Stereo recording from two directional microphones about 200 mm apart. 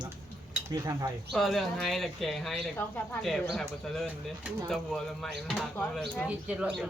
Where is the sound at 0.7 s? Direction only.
20° right (ahead or behind).